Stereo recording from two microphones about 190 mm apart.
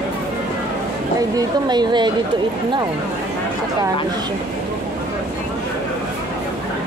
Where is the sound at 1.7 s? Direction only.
25° right (ahead or behind).